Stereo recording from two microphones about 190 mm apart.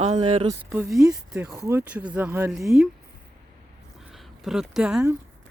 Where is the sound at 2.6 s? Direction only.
Centre (ahead or behind).